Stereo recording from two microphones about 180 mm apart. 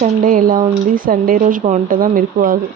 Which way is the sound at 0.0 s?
50° right (ahead or behind).